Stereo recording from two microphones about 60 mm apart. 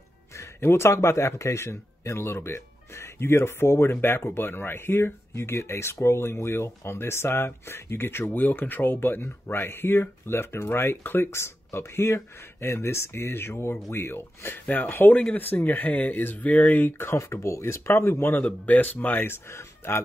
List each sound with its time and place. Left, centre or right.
0.6 s speech: left
17.1 s speech: left
18.4 s speech: left